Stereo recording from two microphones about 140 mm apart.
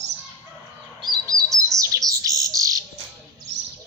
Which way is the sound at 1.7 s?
25° right (ahead or behind).